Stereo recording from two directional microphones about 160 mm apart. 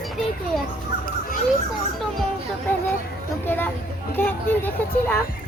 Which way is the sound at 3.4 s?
10° left (ahead or behind).